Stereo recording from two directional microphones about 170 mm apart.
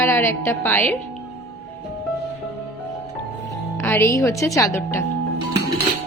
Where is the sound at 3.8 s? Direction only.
15° left (ahead or behind).